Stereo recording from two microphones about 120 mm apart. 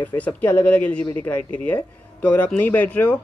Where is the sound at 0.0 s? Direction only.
15° left (ahead or behind).